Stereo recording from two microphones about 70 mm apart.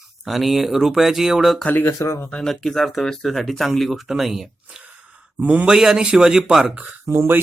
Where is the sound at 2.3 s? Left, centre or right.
Centre.